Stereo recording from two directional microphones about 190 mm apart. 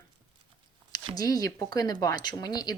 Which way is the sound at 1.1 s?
20° left (ahead or behind).